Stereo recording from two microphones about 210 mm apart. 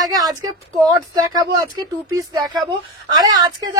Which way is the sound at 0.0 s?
20° right (ahead or behind).